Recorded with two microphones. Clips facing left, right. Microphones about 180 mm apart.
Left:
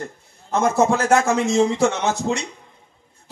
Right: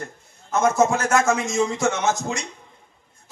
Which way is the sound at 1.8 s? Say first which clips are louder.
Left 2 dB; 30° left (ahead or behind).